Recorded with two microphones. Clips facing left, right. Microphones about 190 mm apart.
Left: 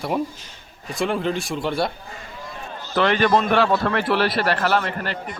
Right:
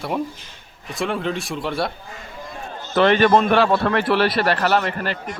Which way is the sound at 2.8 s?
25° right (ahead or behind).